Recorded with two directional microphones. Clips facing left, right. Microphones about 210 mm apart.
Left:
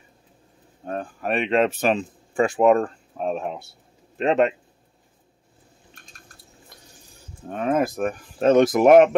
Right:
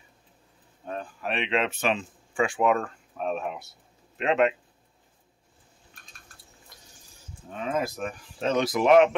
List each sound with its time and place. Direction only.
0.8 s speech: 45° left (ahead or behind)
7.4 s speech: 55° left (ahead or behind)